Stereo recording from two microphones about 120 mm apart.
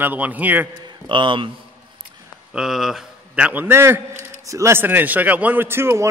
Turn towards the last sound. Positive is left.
turn(degrees=-20)  # may be behind; listen again after turning